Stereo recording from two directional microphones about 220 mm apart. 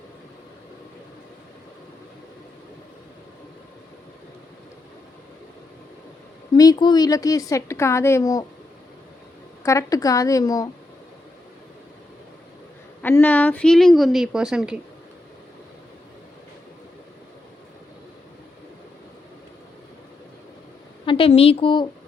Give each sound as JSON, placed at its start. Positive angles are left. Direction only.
{"t": 6.5, "sound": "a woman's voice", "side_deg": 20}
{"t": 9.6, "sound": "a woman's voice", "side_deg": 15}
{"t": 13.0, "sound": "a woman's voice", "side_deg": 10}
{"t": 21.0, "sound": "a woman's voice", "side_deg": 25}